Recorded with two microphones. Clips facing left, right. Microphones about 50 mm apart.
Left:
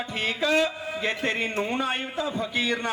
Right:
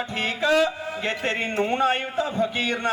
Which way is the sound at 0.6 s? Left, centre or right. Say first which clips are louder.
Right 1 dB; right.